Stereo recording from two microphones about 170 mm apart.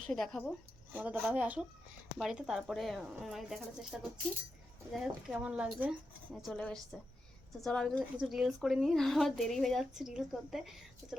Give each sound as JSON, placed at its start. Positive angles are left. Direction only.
{"t": 0.1, "sound": "a woman's voice", "side_deg": 0}
{"t": 0.9, "sound": "a woman's voice", "side_deg": -10}